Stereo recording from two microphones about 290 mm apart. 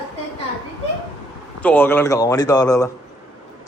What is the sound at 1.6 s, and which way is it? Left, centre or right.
Speech, centre.